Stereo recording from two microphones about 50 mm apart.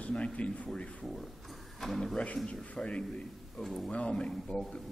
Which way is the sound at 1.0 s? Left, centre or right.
Centre.